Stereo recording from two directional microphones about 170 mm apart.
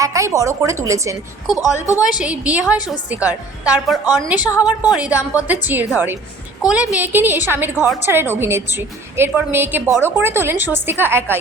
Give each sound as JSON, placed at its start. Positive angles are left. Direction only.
{"t": 0.0, "sound": "a woman's voice", "side_deg": -20}
{"t": 1.5, "sound": "a woman's voice", "side_deg": 20}
{"t": 2.1, "sound": "a woman's voice", "side_deg": -5}
{"t": 2.7, "sound": "a woman's voice", "side_deg": 25}
{"t": 3.2, "sound": "a woman's voice", "side_deg": -5}